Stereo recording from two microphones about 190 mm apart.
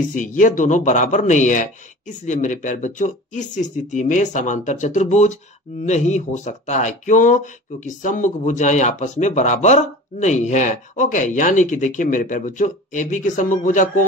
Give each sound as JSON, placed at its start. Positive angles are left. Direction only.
{"t": 0.1, "sound": "speech", "side_deg": 45}